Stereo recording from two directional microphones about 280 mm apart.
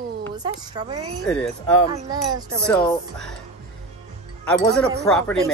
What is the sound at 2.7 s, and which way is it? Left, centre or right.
Speech, centre.